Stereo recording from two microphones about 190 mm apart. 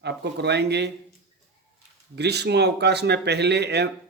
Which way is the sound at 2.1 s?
60° right (ahead or behind).